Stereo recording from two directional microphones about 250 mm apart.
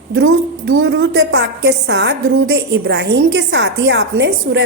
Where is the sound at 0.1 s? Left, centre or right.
Right.